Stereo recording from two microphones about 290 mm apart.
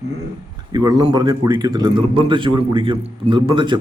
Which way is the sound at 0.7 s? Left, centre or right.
Centre.